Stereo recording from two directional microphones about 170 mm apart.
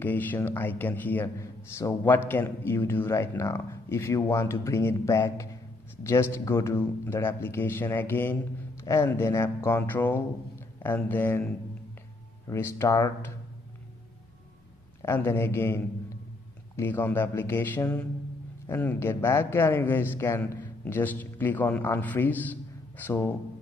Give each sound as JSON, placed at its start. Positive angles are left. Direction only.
{"t": 0.0, "sound": "a man's voice", "side_deg": 10}
{"t": 12.4, "sound": "a man's voice", "side_deg": 15}
{"t": 15.0, "sound": "a man's voice", "side_deg": 15}